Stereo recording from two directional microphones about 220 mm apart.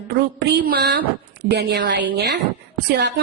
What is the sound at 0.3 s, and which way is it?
A woman's voice, 50° right (ahead or behind).